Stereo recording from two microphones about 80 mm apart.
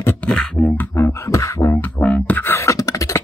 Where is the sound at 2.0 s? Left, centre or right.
Centre.